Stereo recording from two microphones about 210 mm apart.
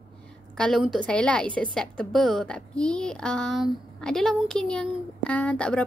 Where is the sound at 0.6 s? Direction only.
Centre (ahead or behind).